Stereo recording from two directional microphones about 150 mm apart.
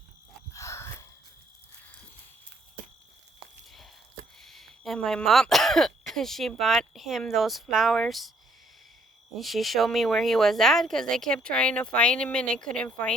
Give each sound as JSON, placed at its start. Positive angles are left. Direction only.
{"t": 0.5, "sound": "wheeze", "side_deg": 20}
{"t": 4.4, "sound": "speech", "side_deg": 0}
{"t": 9.4, "sound": "speech", "side_deg": 0}